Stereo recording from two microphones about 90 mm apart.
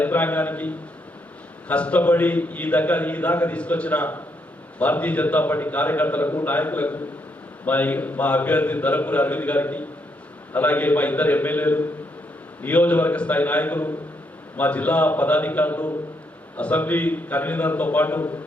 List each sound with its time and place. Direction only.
0.0 s a man's voice: 20° left (ahead or behind)